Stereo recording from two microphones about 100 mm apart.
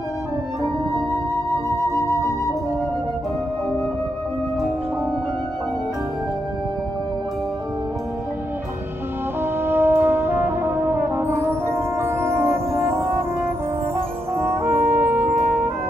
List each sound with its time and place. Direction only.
2.0 s music: 35° left (ahead or behind)
9.4 s brass instrument: 20° right (ahead or behind)
14.3 s brass instrument: 25° right (ahead or behind)